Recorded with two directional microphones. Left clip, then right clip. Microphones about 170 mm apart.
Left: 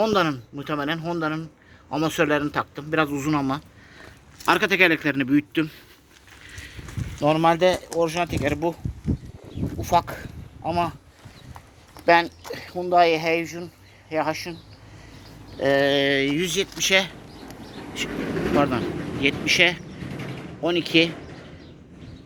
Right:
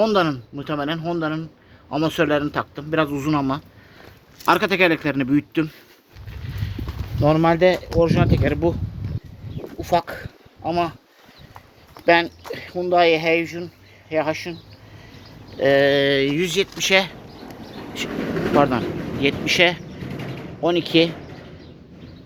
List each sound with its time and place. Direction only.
0.0 s a man's voice: centre (ahead or behind)
4.4 s speech: 15° right (ahead or behind)
7.2 s speech: 10° right (ahead or behind)
9.8 s speech: 10° right (ahead or behind)
12.0 s a man's voice: 5° right (ahead or behind)
15.5 s speech: 15° right (ahead or behind)
18.2 s a sound: 5° left (ahead or behind)
18.5 s speech: 20° right (ahead or behind)